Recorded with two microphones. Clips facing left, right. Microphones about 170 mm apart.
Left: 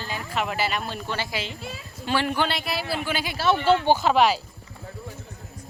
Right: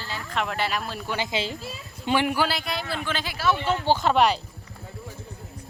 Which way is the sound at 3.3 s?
30° left (ahead or behind).